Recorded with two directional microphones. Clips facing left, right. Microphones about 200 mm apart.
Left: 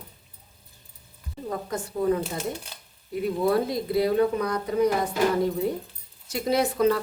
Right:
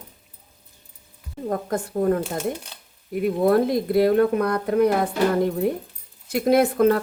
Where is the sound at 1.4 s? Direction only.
55° right (ahead or behind).